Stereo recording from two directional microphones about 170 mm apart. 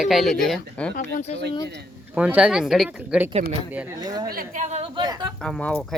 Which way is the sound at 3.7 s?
10° right (ahead or behind).